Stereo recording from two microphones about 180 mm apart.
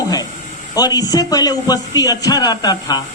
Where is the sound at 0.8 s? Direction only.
20° left (ahead or behind).